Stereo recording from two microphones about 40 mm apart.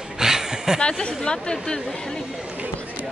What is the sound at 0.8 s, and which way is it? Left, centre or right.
Speech, left.